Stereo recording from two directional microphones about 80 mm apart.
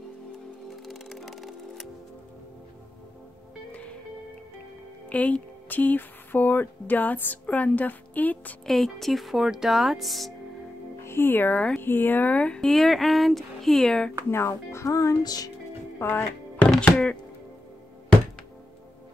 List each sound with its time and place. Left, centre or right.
0.8 s music: centre
5.1 s speech: centre
8.6 s speech: centre
11.1 s speech: left
11.8 s speech: left; by 14.1 s centre
14.3 s speech: left
16.0 s speech: left
16.9 s speech: centre